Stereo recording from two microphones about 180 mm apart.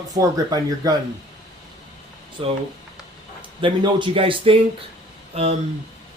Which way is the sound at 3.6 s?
25° right (ahead or behind).